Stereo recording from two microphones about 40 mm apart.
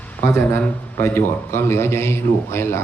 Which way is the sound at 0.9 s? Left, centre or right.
Left.